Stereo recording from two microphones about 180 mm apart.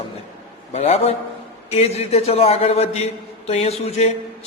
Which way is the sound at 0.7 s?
35° left (ahead or behind).